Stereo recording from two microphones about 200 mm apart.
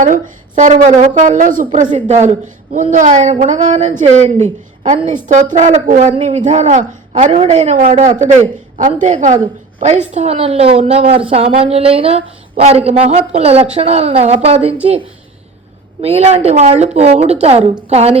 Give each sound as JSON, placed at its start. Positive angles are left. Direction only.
{"t": 0.0, "sound": "speech", "side_deg": -40}
{"t": 16.0, "sound": "a woman's voice", "side_deg": -30}